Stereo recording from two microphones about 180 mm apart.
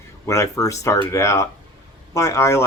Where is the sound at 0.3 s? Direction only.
15° left (ahead or behind).